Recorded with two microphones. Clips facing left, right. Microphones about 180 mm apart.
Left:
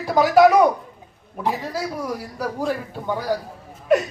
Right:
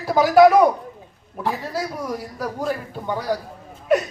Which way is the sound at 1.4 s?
20° left (ahead or behind).